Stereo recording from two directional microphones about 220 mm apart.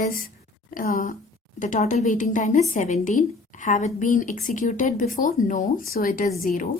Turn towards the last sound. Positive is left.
turn(degrees=40)  # may be behind; listen again after turning